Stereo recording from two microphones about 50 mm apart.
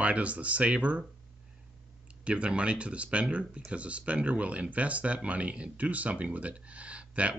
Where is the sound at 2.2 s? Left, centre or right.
Right.